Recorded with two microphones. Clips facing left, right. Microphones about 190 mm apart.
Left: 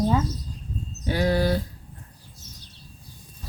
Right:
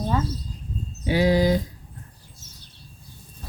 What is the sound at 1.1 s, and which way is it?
Speech, 15° right (ahead or behind).